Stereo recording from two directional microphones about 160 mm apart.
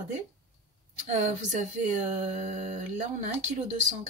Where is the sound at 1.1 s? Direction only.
45° right (ahead or behind).